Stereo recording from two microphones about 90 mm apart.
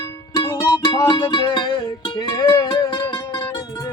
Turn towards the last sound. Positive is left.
turn(degrees=45)  # may be behind; listen again after turning